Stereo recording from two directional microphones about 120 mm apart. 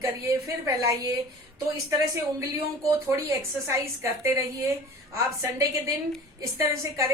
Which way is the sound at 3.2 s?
25° right (ahead or behind).